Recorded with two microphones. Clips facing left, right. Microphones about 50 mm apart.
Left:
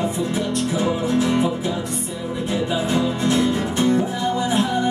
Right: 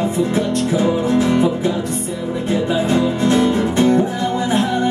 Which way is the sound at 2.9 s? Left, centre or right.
Right.